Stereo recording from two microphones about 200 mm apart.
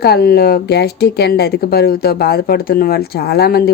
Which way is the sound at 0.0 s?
50° left (ahead or behind).